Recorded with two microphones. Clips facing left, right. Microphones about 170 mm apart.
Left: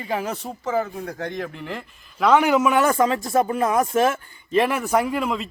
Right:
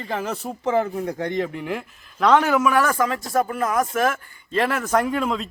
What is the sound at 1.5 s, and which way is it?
Speech, 10° right (ahead or behind).